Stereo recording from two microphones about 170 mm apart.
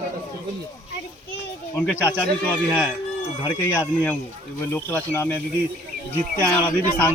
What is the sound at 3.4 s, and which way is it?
Speech, 15° left (ahead or behind).